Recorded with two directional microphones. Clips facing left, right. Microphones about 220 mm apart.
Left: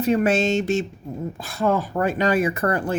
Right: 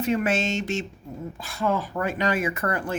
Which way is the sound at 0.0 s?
35° left (ahead or behind).